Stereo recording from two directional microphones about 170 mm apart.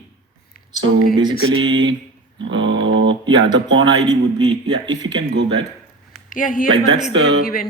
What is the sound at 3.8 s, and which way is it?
Speech, 25° right (ahead or behind).